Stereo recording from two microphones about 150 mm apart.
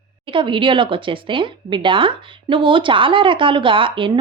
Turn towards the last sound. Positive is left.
turn(degrees=-35)  # may be behind; listen again after turning